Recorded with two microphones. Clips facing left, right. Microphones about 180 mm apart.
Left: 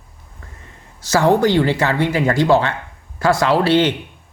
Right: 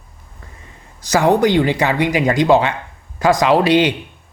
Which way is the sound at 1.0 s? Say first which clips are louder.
Right 1 dB; 15° right (ahead or behind).